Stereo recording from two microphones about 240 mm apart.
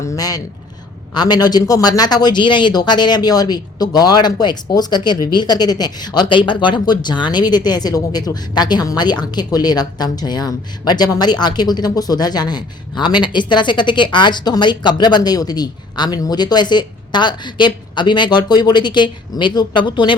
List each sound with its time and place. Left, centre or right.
0.0 s speech: centre